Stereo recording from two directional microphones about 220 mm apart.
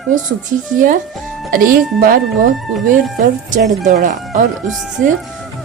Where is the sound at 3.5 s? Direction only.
35° right (ahead or behind).